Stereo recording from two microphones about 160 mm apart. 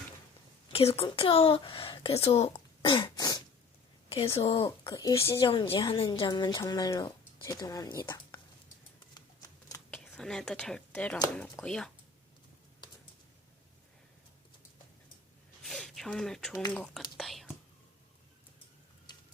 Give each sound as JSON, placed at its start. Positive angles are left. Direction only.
{"t": 0.7, "sound": "a woman's voice", "side_deg": 35}
{"t": 5.7, "sound": "a woman's voice", "side_deg": 30}
{"t": 9.1, "sound": "typing", "side_deg": 25}
{"t": 9.9, "sound": "speech", "side_deg": 5}
{"t": 15.6, "sound": "speech", "side_deg": 0}
{"t": 19.1, "sound": "a sound", "side_deg": 25}